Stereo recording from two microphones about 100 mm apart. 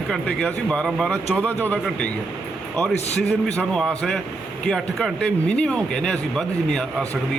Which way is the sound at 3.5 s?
10° left (ahead or behind).